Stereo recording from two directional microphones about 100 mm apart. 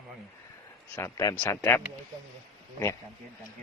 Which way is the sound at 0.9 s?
30° left (ahead or behind).